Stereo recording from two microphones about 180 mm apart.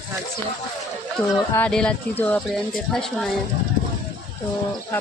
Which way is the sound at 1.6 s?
5° left (ahead or behind).